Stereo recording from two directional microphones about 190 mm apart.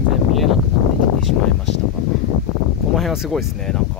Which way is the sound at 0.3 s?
Centre (ahead or behind).